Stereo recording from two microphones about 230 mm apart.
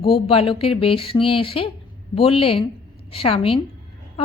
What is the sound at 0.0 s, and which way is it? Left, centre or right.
Speech, left.